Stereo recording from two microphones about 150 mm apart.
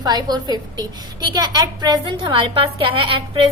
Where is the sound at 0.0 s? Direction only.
25° right (ahead or behind).